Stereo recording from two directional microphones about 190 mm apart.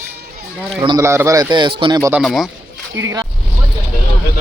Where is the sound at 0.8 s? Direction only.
15° right (ahead or behind).